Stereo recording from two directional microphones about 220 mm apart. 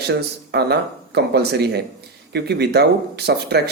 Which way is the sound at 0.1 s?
50° right (ahead or behind).